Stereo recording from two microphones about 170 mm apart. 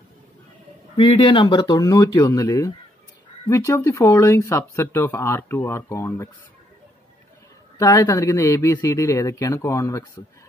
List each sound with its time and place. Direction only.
0.9 s speech: 30° left (ahead or behind); by 6.3 s 15° left (ahead or behind)
7.7 s speech: 20° left (ahead or behind)